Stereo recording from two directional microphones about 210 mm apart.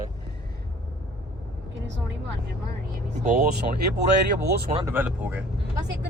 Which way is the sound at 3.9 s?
50° right (ahead or behind).